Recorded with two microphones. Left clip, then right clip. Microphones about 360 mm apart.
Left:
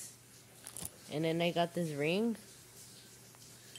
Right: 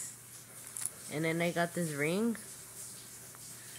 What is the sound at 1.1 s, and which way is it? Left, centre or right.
Speech, left.